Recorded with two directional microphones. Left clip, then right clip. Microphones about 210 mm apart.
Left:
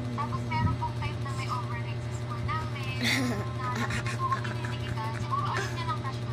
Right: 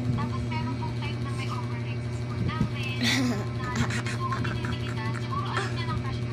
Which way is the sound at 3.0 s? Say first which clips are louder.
Right 2 dB; 20° left (ahead or behind).